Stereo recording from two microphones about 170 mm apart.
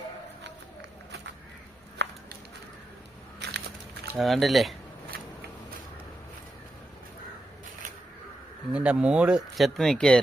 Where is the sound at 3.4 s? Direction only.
75° right (ahead or behind).